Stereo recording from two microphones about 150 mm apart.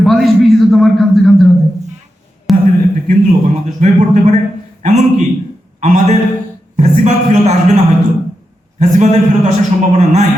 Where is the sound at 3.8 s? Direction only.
50° right (ahead or behind).